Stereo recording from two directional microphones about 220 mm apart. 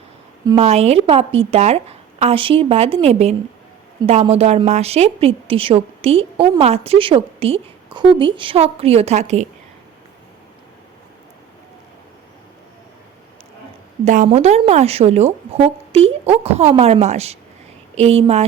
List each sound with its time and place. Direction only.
0.4 s a woman's voice: 30° right (ahead or behind)
14.0 s a woman's voice: 35° right (ahead or behind)